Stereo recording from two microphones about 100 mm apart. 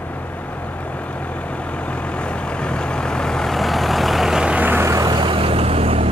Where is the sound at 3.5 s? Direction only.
Centre (ahead or behind); by 4.8 s 15° right (ahead or behind).